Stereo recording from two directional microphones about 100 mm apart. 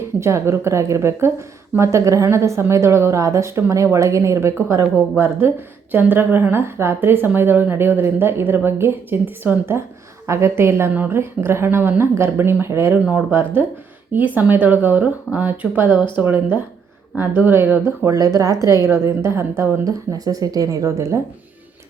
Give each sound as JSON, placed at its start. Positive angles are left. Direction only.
{"t": 0.2, "sound": "a woman's voice", "side_deg": -25}
{"t": 19.8, "sound": "speech", "side_deg": -35}